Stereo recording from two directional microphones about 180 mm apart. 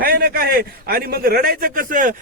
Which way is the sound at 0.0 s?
55° right (ahead or behind).